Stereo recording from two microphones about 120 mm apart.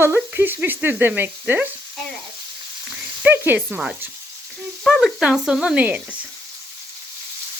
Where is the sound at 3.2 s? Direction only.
20° right (ahead or behind).